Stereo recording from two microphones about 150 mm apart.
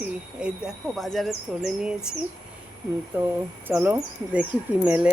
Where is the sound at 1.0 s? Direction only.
Centre (ahead or behind).